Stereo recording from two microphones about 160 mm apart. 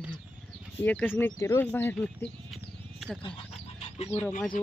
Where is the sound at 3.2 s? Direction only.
35° left (ahead or behind).